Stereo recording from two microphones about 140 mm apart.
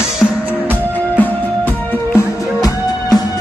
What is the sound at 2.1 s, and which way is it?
Music, 25° left (ahead or behind).